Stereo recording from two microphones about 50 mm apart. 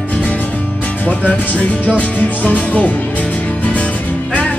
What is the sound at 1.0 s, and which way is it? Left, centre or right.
Music, left.